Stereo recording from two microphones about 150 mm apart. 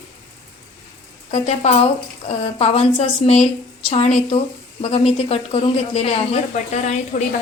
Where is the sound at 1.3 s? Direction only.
45° left (ahead or behind).